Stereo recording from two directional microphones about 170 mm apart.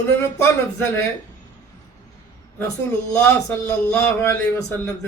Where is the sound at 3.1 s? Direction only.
15° left (ahead or behind).